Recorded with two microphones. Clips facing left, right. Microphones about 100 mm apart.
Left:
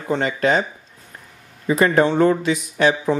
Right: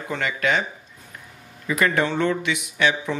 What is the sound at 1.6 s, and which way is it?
Speech, 30° left (ahead or behind).